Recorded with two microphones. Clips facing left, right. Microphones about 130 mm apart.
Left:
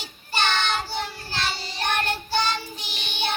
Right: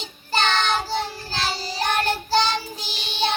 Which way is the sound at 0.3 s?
35° right (ahead or behind).